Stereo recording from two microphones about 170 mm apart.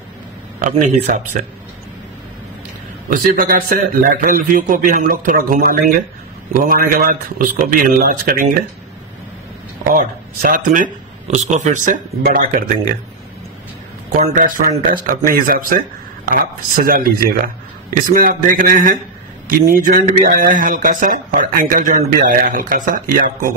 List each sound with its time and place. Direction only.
0.6 s speech: 50° right (ahead or behind)
3.1 s a man's voice: 55° right (ahead or behind)
9.9 s speech: 55° right (ahead or behind)
14.2 s a man's voice: 45° right (ahead or behind)